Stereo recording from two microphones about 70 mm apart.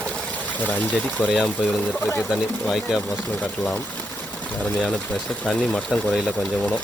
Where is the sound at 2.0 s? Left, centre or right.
Left.